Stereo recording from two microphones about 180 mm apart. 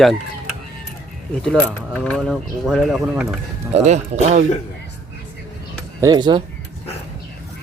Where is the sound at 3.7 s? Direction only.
40° right (ahead or behind).